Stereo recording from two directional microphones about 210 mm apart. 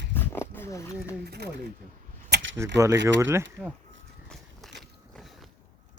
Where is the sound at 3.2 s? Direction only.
10° right (ahead or behind).